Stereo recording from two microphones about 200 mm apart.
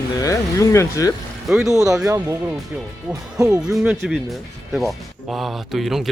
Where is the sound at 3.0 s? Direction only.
5° right (ahead or behind).